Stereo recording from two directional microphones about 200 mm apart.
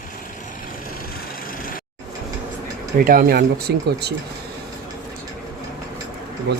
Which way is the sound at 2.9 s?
45° right (ahead or behind).